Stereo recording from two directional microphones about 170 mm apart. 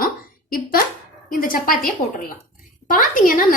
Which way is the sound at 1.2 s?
55° left (ahead or behind).